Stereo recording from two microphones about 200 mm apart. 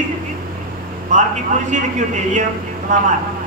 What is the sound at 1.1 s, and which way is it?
A man's voice, 35° right (ahead or behind).